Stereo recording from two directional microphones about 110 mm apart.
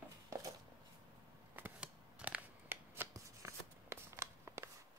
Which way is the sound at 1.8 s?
10° right (ahead or behind).